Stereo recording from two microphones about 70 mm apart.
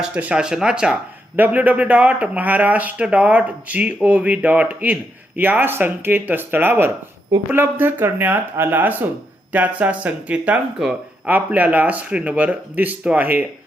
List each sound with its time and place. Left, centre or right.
0.0 s speech: centre
1.4 s speech: right
10.8 s speech: centre
11.3 s speech: right